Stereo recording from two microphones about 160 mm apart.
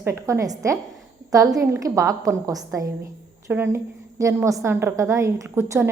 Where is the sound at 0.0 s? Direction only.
20° right (ahead or behind).